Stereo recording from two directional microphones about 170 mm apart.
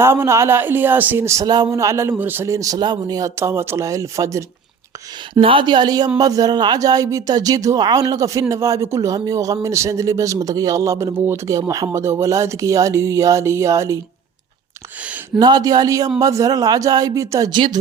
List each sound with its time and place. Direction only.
0.0 s speech: 15° right (ahead or behind)
5.3 s speech: 30° right (ahead or behind)
15.4 s speech: 25° right (ahead or behind)